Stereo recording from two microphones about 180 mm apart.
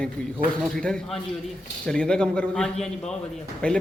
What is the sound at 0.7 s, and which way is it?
Speech, 5° left (ahead or behind).